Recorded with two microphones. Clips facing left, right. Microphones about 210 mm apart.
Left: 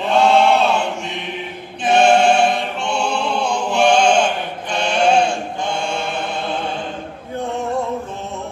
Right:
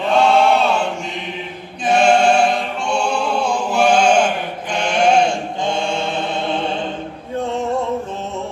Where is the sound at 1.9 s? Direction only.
5° left (ahead or behind).